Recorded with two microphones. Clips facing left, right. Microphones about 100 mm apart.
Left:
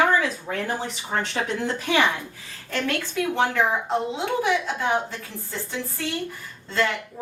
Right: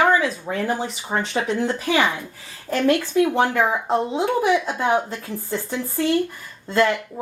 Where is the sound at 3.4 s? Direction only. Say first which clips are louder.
Right 3 dB; 50° right (ahead or behind).